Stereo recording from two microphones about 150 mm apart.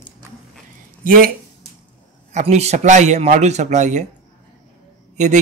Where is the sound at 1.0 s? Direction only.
70° right (ahead or behind).